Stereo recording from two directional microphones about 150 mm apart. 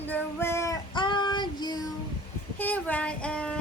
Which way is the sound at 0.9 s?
30° left (ahead or behind).